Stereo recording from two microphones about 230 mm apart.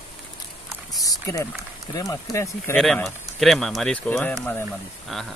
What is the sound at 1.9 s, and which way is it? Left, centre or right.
Speech, centre.